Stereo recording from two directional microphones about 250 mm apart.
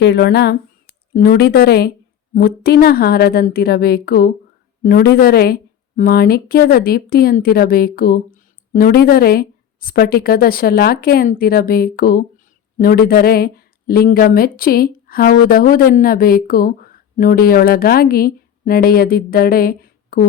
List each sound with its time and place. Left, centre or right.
0.0 s a woman's voice: left